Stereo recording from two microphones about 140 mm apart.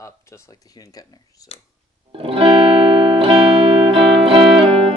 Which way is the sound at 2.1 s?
40° right (ahead or behind).